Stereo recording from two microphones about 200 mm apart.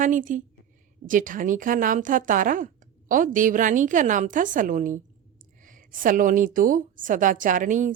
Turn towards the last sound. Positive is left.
turn(degrees=-40)  # may be behind; listen again after turning